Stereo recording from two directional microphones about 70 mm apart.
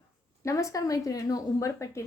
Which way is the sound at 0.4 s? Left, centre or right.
Left.